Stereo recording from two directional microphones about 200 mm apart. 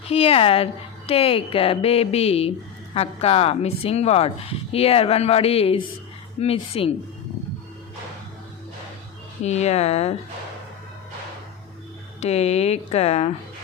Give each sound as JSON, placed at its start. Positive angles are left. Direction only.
{"t": 0.1, "sound": "a woman's voice", "side_deg": 30}
{"t": 9.4, "sound": "speech", "side_deg": 35}
{"t": 12.2, "sound": "speech", "side_deg": 30}